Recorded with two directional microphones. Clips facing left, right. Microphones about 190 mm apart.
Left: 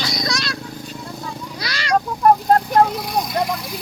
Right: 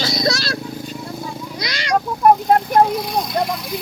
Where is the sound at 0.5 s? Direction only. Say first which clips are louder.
Right 4 dB; 10° right (ahead or behind).